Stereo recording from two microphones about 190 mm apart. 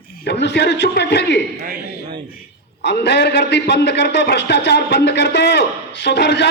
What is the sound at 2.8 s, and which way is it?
A man's voice, 60° left (ahead or behind).